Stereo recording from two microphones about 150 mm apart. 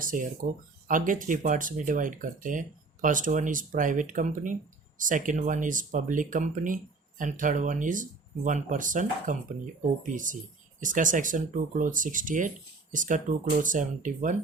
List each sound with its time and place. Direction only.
0.0 s speech: 65° right (ahead or behind)